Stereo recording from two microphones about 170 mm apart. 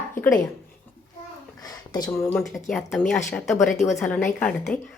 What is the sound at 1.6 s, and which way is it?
Speech, 20° left (ahead or behind).